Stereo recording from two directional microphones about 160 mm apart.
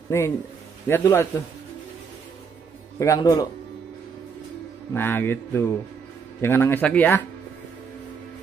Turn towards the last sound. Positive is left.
turn(degrees=10)  # may be behind; listen again after turning